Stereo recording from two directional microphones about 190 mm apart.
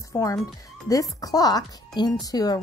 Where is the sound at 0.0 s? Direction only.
15° left (ahead or behind).